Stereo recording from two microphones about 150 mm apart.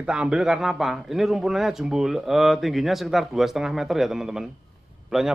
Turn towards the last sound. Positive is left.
turn(degrees=-5)  # may be behind; listen again after turning